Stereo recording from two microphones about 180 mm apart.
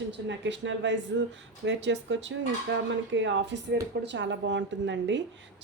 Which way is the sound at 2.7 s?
90° right.